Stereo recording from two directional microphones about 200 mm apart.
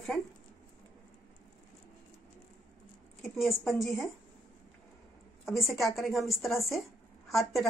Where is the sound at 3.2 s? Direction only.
Centre (ahead or behind).